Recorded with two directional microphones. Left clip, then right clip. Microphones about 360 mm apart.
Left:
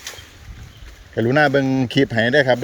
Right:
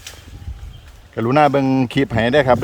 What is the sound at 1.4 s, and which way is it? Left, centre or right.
Speech, right.